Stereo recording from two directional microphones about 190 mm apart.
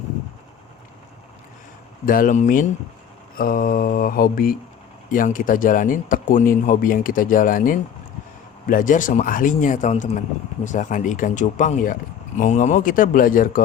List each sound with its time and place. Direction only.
2.0 s speech: 45° left (ahead or behind)